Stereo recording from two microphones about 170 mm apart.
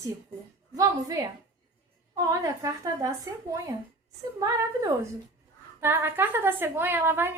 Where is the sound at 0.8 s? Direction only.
20° right (ahead or behind).